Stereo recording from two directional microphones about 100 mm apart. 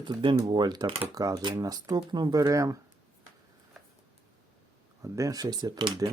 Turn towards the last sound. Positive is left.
turn(degrees=-40)  # may be behind; listen again after turning